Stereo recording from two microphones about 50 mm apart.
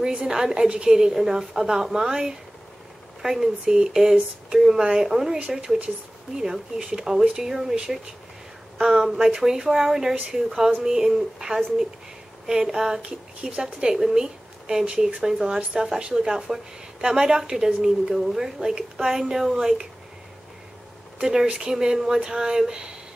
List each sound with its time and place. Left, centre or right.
0.0 s a woman's voice: right
0.3 s a woman's voice: centre
6.8 s a woman's voice: right
7.4 s a woman's voice: centre
8.7 s a woman's voice: centre
21.2 s a woman's voice: centre